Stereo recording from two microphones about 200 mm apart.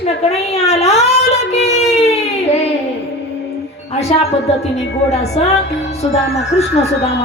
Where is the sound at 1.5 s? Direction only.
30° left (ahead or behind).